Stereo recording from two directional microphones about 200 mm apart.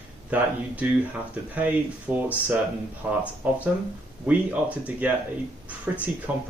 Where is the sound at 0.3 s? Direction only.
10° right (ahead or behind).